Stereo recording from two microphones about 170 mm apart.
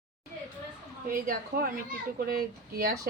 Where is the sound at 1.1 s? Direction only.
60° right (ahead or behind).